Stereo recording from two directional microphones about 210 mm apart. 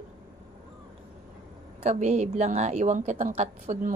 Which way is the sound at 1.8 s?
35° right (ahead or behind).